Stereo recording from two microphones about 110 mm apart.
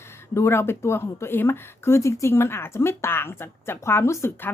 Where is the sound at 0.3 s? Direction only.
25° left (ahead or behind).